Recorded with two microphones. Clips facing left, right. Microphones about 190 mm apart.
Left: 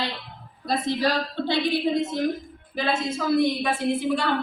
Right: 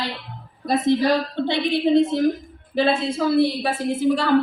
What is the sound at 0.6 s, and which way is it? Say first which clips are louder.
A woman's voice: right 6 dB; 20° right (ahead or behind).